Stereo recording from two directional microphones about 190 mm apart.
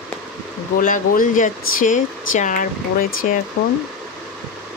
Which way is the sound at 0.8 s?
45° left (ahead or behind).